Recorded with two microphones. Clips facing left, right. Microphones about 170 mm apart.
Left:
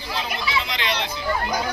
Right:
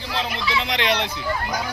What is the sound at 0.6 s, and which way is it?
Speech, 65° right (ahead or behind).